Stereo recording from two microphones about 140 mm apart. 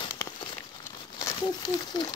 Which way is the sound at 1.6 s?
30° left (ahead or behind).